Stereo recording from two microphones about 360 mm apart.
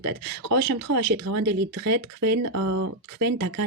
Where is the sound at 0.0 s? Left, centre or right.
Right.